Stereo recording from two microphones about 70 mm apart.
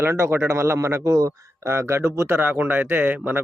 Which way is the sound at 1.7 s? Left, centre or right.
Right.